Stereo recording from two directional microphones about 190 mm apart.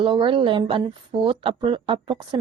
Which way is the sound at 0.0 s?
25° right (ahead or behind).